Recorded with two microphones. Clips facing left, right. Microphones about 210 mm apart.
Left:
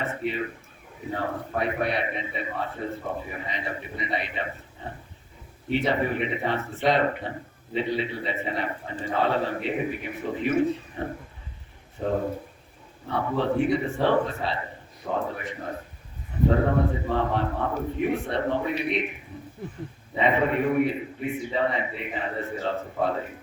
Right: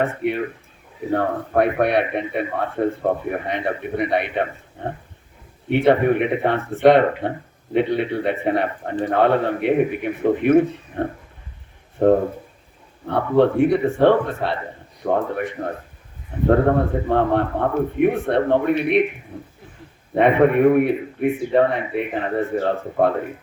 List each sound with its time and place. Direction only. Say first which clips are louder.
0.0 s speech: right 7 dB; 60° right (ahead or behind)
16.5 s speech: right 7 dB; 60° right (ahead or behind)